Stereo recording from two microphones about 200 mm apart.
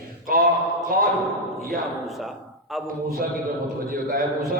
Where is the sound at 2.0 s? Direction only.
Centre (ahead or behind).